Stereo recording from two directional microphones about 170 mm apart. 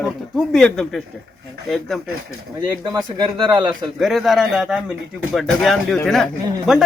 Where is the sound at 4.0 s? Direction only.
Centre (ahead or behind).